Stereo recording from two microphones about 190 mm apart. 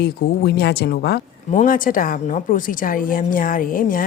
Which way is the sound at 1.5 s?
45° left (ahead or behind).